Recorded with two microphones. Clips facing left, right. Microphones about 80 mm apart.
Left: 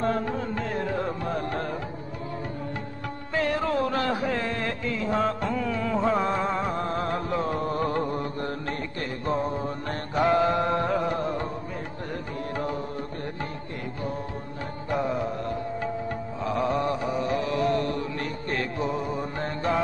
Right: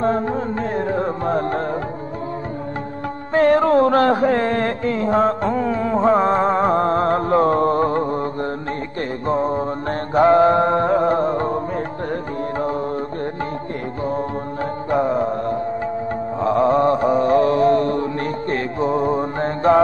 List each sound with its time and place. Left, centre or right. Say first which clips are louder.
0.0 s music: right 7 dB; right
3.3 s a sound: right 11 dB; right
7.8 s music: right 7 dB; right
9.3 s mantra: right 8 dB; right
14.9 s music: right 8 dB; right
16.3 s mantra: right 10 dB; right